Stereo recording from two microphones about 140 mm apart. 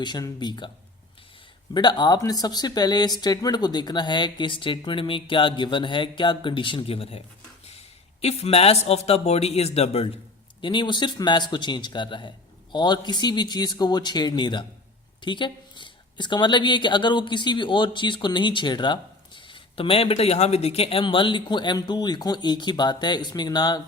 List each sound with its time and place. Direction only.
0.0 s speech: 30° left (ahead or behind)
1.7 s speech: 30° left (ahead or behind)
8.2 s a man's voice: 45° left (ahead or behind)
10.6 s speech: 35° left (ahead or behind)